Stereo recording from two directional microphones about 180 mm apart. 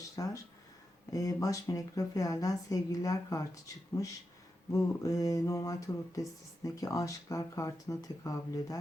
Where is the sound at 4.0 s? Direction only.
20° left (ahead or behind).